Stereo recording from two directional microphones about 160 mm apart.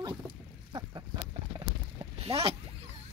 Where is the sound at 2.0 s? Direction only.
35° right (ahead or behind).